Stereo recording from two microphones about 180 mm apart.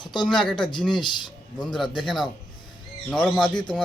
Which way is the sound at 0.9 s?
25° left (ahead or behind).